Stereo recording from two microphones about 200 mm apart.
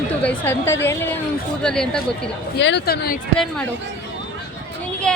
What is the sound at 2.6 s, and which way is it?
Speech, 60° left (ahead or behind).